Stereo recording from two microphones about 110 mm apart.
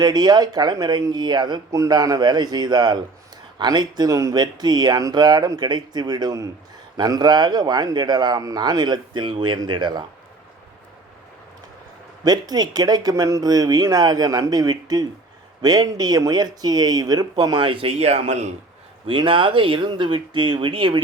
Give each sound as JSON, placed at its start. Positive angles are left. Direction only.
{"t": 0.0, "sound": "speech", "side_deg": -40}
{"t": 12.2, "sound": "speech", "side_deg": -35}
{"t": 18.0, "sound": "speech", "side_deg": -80}
{"t": 19.0, "sound": "speech", "side_deg": -50}